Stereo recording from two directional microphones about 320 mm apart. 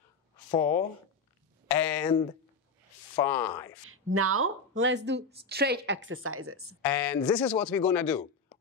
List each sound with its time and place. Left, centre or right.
0.5 s speech: centre
1.7 s a sound: centre
3.2 s speech: centre
3.9 s speech: right
6.8 s speech: centre